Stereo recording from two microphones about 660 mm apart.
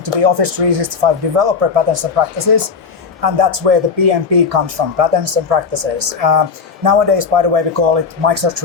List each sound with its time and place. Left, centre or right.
0.0 s speech: right
6.8 s speech: right